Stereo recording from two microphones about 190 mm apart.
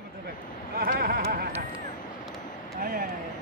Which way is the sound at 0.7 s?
50° right (ahead or behind).